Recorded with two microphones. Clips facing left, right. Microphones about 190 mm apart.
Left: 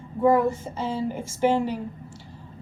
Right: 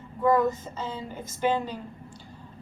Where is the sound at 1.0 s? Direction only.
90° left.